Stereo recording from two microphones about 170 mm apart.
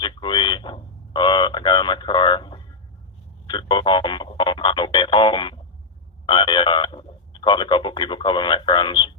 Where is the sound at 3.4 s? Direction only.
25° left (ahead or behind).